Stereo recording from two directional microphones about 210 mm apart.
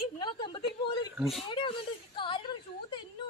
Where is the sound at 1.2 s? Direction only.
Centre (ahead or behind).